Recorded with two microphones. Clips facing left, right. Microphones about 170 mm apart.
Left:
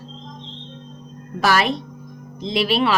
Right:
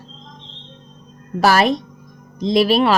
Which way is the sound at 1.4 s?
40° right (ahead or behind).